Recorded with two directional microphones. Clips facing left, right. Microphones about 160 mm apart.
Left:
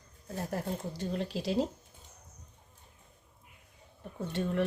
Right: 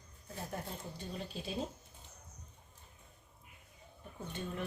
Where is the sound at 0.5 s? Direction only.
80° left.